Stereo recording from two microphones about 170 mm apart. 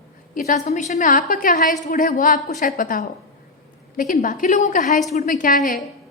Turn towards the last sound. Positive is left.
turn(degrees=55)  # may be behind; listen again after turning